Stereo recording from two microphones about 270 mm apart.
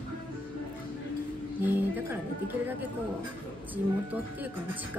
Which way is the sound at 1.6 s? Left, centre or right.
Centre.